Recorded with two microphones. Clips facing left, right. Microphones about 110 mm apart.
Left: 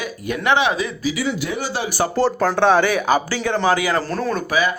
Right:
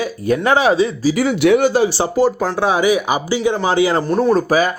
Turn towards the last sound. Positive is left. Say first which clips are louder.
# right 4 dB
turn(degrees=-40)  # may be behind; listen again after turning